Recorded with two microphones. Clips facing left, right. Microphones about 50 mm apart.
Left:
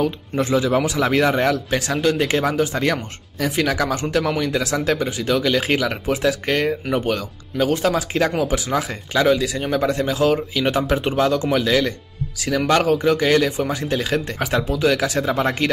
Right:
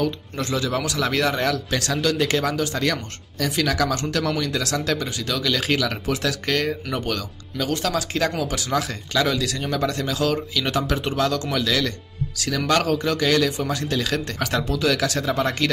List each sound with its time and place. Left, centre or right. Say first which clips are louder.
0.0 s a man's voice: left 4 dB; centre